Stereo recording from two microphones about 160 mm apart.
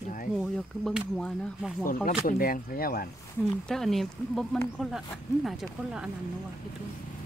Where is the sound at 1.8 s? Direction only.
60° left (ahead or behind).